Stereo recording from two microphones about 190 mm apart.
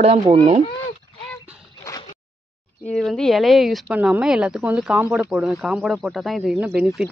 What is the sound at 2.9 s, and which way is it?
Speech, centre (ahead or behind).